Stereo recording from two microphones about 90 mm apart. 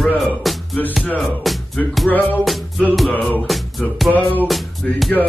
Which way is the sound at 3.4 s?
Centre (ahead or behind).